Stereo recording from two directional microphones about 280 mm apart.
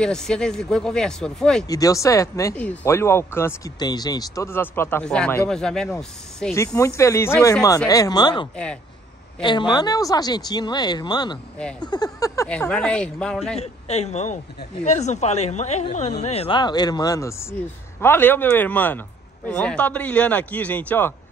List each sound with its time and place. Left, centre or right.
0.0 s speech: centre
13.6 s speech: left; by 21.1 s centre